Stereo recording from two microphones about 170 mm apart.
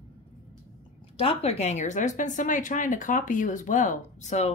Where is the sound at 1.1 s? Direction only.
35° left (ahead or behind).